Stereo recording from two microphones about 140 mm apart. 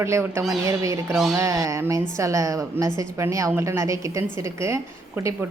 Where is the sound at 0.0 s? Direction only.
20° right (ahead or behind).